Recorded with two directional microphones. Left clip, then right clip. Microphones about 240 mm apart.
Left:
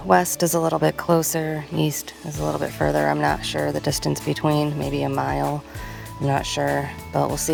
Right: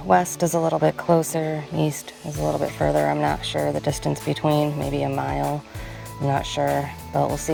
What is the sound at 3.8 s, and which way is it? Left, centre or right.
Speech, left.